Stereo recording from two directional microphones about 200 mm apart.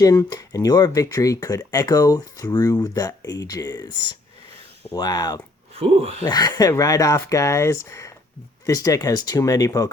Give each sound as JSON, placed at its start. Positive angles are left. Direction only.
{"t": 0.0, "sound": "speech", "side_deg": 20}
{"t": 5.7, "sound": "speech", "side_deg": -30}
{"t": 6.2, "sound": "speech", "side_deg": 20}